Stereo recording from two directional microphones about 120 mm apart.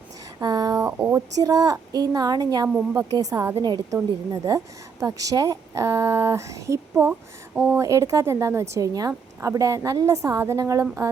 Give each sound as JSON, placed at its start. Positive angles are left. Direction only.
{"t": 0.3, "sound": "a sound", "side_deg": -30}
{"t": 0.9, "sound": "speech", "side_deg": -10}
{"t": 1.4, "sound": "speech", "side_deg": -30}
{"t": 6.9, "sound": "speech", "side_deg": -10}
{"t": 7.8, "sound": "speech", "side_deg": -30}